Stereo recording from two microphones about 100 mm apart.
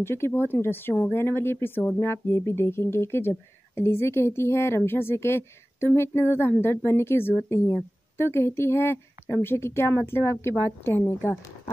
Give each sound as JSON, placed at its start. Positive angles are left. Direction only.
{"t": 0.0, "sound": "a woman's voice", "side_deg": 25}